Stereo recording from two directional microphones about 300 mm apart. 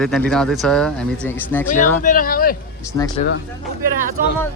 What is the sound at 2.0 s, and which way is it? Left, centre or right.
Speech, left.